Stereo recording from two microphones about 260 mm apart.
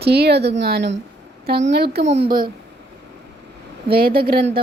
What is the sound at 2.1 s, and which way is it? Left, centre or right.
Speech, right.